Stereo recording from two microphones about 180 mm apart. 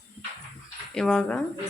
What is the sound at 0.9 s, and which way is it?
Speech, 5° left (ahead or behind).